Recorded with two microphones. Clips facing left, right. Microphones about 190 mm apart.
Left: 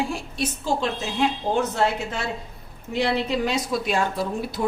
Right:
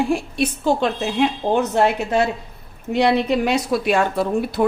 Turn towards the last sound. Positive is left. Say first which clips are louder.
# right 7 dB
turn(degrees=-60)  # may be behind; listen again after turning